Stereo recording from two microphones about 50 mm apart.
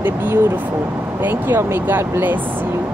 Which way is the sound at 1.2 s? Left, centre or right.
Right.